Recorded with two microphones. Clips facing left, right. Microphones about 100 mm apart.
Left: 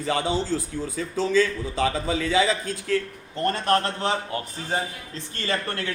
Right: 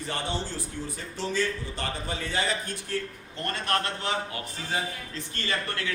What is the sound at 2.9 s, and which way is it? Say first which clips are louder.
Speech: left 3 dB; 90° left.